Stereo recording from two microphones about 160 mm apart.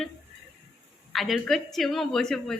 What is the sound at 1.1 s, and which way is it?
A woman's voice, centre (ahead or behind).